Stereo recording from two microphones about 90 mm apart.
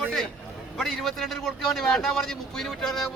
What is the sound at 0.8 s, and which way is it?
A man's voice, centre (ahead or behind).